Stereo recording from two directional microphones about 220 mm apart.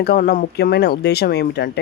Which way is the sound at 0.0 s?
45° left (ahead or behind).